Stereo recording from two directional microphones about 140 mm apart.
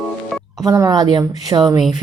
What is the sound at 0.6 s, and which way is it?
Speech, 25° right (ahead or behind).